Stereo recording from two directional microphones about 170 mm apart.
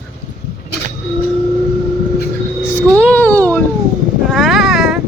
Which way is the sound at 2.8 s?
10° left (ahead or behind).